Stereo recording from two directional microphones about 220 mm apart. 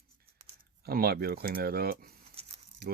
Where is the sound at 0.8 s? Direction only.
45° right (ahead or behind).